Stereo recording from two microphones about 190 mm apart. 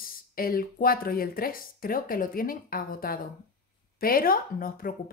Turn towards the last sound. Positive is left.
turn(degrees=50)  # may be behind; listen again after turning